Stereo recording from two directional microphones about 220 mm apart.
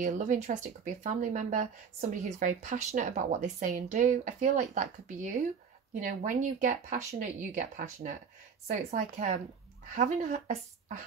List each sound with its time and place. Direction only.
0.0 s speech: 35° right (ahead or behind)